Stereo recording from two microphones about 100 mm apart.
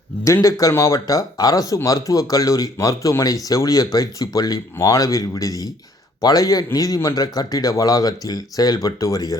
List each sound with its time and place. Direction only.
0.7 s speech: 30° left (ahead or behind)